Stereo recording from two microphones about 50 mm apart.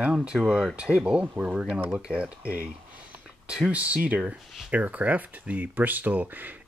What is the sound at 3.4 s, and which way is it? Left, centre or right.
Speech, centre.